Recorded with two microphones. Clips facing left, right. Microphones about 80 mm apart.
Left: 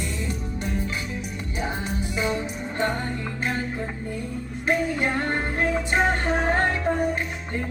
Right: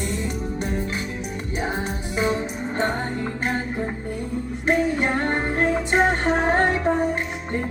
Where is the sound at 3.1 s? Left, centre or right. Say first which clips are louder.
Right 3 dB; right.